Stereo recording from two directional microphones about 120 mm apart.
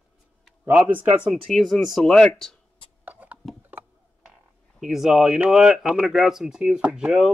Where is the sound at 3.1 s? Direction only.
10° right (ahead or behind).